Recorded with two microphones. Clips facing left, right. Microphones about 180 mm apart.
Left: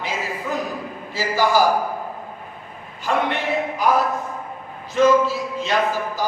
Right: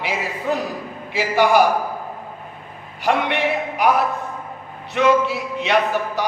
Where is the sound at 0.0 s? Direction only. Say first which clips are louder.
Right 3 dB; 70° right (ahead or behind).